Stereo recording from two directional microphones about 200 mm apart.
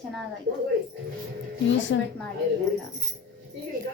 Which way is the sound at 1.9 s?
60° left (ahead or behind).